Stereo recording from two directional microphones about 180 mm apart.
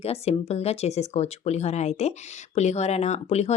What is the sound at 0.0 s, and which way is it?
Speech, 35° left (ahead or behind).